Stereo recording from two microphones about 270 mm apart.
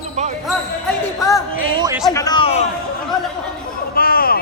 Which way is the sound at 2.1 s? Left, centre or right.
Centre.